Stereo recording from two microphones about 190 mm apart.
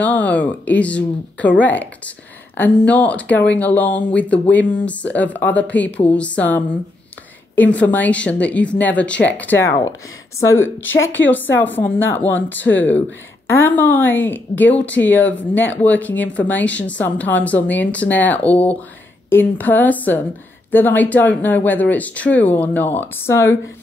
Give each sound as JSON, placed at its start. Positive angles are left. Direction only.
{"t": 0.0, "sound": "a woman's voice", "side_deg": 10}
{"t": 12.5, "sound": "speech", "side_deg": 80}
{"t": 13.5, "sound": "a woman's voice", "side_deg": 10}